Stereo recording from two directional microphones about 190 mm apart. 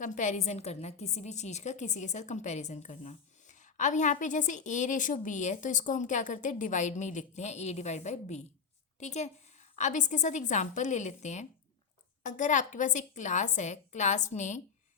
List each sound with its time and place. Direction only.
0.0 s a woman's voice: 40° left (ahead or behind)